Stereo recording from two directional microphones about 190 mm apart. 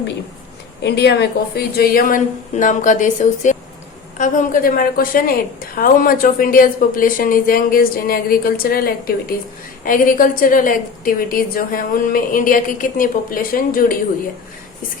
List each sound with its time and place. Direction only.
0.8 s a woman's voice: 60° left (ahead or behind)